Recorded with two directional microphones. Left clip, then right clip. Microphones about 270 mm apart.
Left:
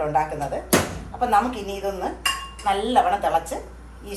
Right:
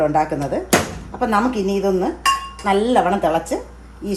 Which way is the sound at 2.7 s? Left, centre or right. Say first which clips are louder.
Right 3 dB; right.